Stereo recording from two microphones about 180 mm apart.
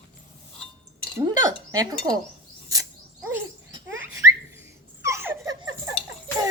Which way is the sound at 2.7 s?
15° right (ahead or behind).